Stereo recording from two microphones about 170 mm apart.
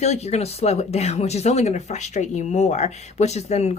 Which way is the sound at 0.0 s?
40° left (ahead or behind).